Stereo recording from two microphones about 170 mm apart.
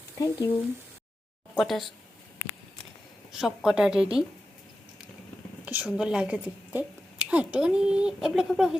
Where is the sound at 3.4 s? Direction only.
5° right (ahead or behind).